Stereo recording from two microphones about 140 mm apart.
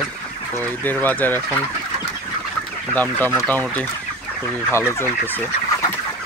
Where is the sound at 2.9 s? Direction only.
10° left (ahead or behind).